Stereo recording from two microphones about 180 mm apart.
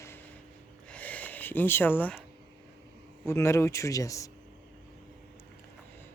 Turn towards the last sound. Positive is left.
turn(degrees=20)  # may be behind; listen again after turning